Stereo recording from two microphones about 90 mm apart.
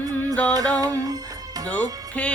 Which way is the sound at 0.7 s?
45° right (ahead or behind).